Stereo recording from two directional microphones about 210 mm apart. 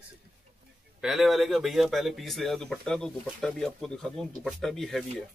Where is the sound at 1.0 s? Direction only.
Centre (ahead or behind).